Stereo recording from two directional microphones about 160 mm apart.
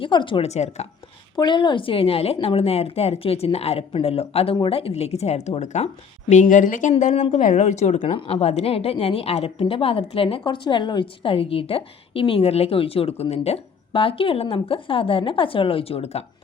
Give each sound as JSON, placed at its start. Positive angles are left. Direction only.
{"t": 0.0, "sound": "a woman's voice", "side_deg": 30}
{"t": 1.4, "sound": "a woman's voice", "side_deg": 30}